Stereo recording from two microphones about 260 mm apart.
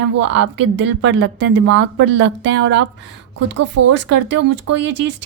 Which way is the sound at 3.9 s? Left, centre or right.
Right.